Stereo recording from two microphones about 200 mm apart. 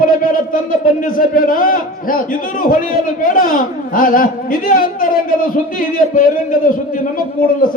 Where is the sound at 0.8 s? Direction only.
45° left (ahead or behind).